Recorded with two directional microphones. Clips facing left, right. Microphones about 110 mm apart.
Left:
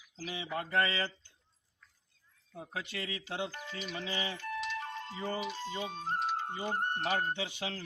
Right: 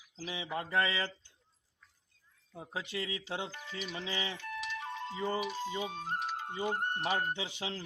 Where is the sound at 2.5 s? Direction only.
25° right (ahead or behind).